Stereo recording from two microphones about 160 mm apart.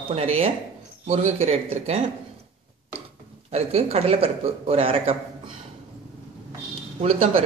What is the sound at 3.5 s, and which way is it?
Speech, 40° right (ahead or behind).